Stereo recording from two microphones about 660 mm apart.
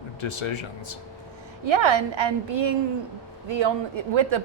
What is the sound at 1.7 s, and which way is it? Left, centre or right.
Speech, right.